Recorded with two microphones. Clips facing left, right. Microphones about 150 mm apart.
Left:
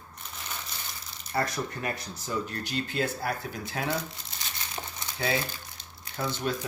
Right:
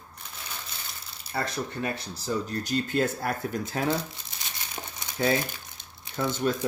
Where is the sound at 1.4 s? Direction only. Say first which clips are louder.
Right 2 dB; 25° right (ahead or behind); by 3.8 s 45° right (ahead or behind).